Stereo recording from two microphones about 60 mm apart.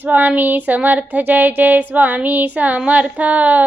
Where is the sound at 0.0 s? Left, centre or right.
Right.